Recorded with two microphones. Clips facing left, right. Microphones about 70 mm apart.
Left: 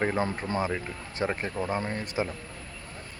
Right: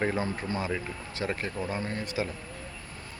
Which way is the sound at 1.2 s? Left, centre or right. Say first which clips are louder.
Left 2 dB; centre.